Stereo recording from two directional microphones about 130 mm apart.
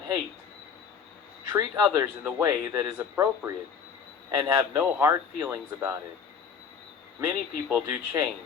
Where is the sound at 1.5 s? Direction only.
30° right (ahead or behind).